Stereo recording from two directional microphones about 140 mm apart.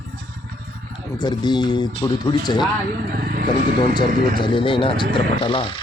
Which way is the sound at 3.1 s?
90° right.